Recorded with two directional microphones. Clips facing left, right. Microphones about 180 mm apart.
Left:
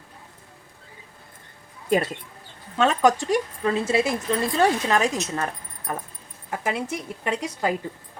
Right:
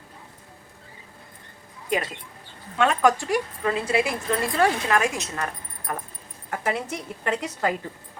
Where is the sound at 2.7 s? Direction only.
25° left (ahead or behind).